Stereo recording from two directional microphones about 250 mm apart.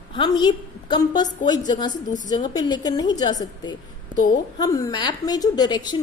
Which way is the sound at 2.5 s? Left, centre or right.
Centre.